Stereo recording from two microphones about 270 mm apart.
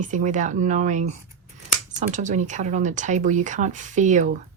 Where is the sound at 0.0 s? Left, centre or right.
Right.